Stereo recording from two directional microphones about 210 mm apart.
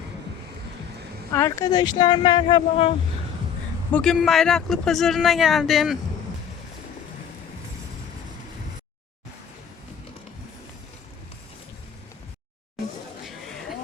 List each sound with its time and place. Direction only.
1.3 s speech: 10° left (ahead or behind)
3.9 s speech: centre (ahead or behind)